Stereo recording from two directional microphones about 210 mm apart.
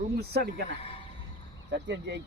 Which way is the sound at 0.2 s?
50° right (ahead or behind).